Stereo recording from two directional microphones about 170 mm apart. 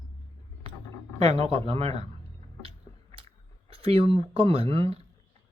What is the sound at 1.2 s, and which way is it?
Speech, 35° right (ahead or behind).